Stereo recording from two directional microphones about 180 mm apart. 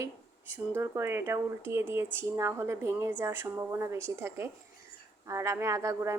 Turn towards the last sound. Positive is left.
turn(degrees=-15)  # may be behind; listen again after turning